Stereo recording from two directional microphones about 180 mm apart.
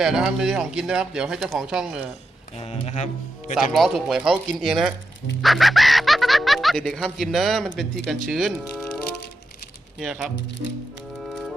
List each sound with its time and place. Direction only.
0.0 s speech: 5° right (ahead or behind)
2.6 s speech: 35° left (ahead or behind)
3.7 s speech: centre (ahead or behind)
10.0 s speech: 5° right (ahead or behind)